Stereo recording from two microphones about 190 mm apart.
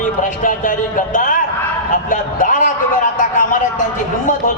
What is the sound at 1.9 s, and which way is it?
Speech, 45° left (ahead or behind).